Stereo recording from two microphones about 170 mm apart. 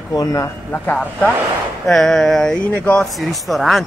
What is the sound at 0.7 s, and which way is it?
Speech, 10° left (ahead or behind).